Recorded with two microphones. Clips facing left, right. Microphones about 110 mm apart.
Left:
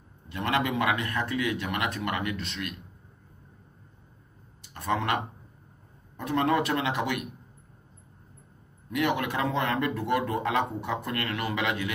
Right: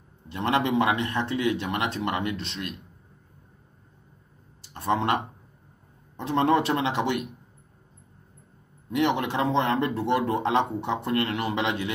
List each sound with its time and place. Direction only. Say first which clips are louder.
0.3 s speech: right 3 dB; 30° right (ahead or behind)
4.7 s speech: right 3 dB; 30° right (ahead or behind)
8.9 s speech: right 3 dB; 30° right (ahead or behind)